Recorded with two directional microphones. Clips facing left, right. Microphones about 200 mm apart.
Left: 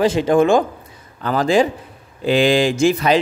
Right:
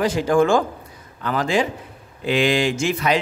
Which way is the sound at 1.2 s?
35° left (ahead or behind).